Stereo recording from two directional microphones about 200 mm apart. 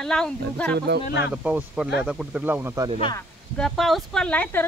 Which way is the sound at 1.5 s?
5° right (ahead or behind).